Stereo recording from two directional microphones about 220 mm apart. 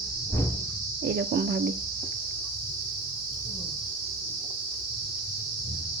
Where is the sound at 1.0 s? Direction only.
50° right (ahead or behind).